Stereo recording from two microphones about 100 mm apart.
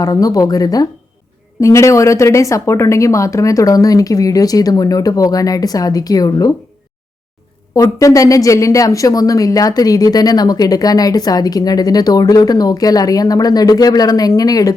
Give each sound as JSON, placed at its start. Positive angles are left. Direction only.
{"t": 0.0, "sound": "a woman's voice", "side_deg": 35}
{"t": 7.8, "sound": "a woman's voice", "side_deg": 35}